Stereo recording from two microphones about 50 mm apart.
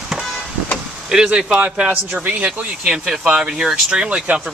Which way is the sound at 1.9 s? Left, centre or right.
Right.